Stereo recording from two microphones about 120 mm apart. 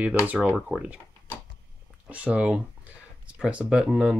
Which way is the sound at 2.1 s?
10° right (ahead or behind).